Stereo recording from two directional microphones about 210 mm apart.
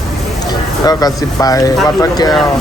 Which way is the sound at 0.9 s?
15° left (ahead or behind).